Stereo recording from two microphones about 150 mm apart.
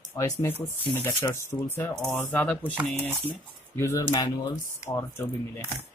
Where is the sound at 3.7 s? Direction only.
20° left (ahead or behind).